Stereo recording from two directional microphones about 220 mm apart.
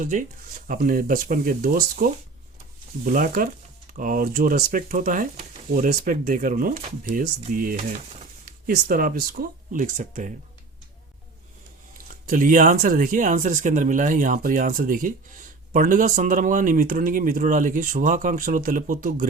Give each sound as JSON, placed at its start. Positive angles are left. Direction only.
{"t": 0.0, "sound": "speech", "side_deg": -35}
{"t": 12.3, "sound": "speech", "side_deg": -35}